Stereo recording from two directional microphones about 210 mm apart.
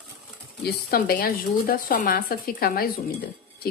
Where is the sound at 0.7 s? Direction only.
45° left (ahead or behind).